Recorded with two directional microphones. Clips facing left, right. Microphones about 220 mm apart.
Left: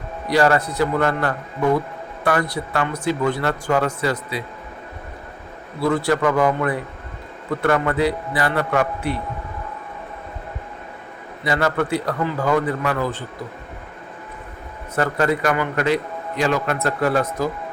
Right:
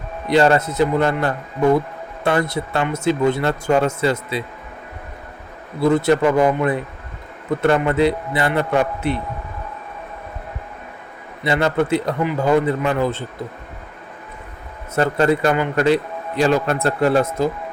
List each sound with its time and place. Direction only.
0.3 s speech: 25° right (ahead or behind)
5.8 s speech: 20° right (ahead or behind)
11.4 s speech: 25° right (ahead or behind)
14.9 s speech: 25° right (ahead or behind)